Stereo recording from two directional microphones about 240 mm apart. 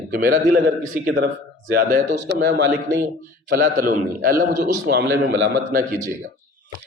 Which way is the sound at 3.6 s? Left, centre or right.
Right.